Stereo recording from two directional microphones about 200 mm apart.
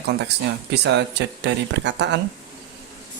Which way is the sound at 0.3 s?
55° right (ahead or behind).